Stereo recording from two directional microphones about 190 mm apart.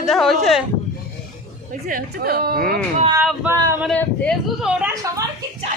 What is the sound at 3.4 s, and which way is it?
Speech, 10° right (ahead or behind).